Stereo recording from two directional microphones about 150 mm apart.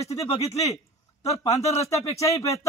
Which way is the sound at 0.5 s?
20° left (ahead or behind).